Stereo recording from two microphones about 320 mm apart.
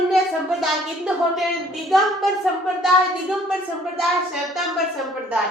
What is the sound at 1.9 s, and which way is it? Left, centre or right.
Speech, centre.